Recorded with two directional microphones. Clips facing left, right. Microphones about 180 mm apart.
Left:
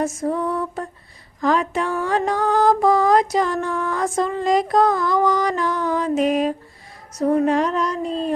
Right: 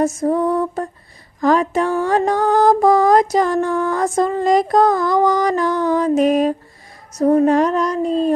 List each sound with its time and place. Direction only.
0.0 s music: 40° right (ahead or behind)